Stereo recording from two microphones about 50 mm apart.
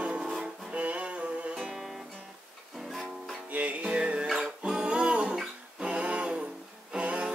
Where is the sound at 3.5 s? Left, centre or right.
Right.